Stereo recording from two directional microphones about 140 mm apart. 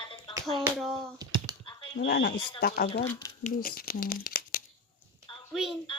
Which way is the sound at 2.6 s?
90° left.